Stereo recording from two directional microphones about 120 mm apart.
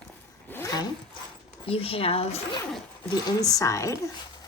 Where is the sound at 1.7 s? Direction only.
50° left (ahead or behind).